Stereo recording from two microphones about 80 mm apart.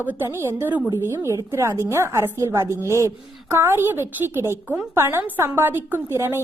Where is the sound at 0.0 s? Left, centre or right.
Right.